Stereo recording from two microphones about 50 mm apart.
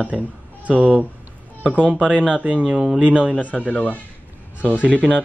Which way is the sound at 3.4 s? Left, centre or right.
Left.